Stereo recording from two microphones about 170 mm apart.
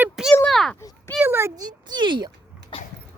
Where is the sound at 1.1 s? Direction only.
15° right (ahead or behind).